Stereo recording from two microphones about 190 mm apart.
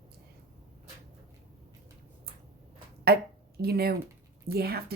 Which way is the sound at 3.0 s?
55° right (ahead or behind).